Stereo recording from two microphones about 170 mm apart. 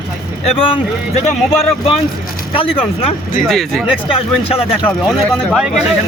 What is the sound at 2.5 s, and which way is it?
Speech, 30° left (ahead or behind).